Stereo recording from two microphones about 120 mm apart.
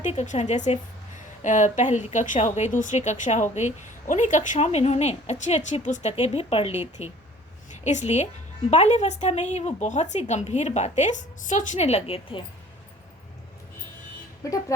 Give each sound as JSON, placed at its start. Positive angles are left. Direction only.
{"t": 0.0, "sound": "a woman's voice", "side_deg": 75}
{"t": 4.1, "sound": "speech", "side_deg": 90}
{"t": 7.9, "sound": "speech", "side_deg": 75}